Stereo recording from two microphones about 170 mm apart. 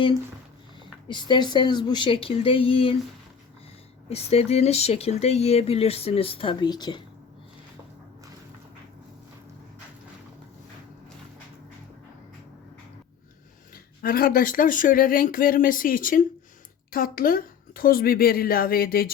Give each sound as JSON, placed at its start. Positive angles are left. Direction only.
{"t": 1.0, "sound": "speech", "side_deg": 25}
{"t": 4.1, "sound": "speech", "side_deg": 35}
{"t": 14.0, "sound": "speech", "side_deg": 60}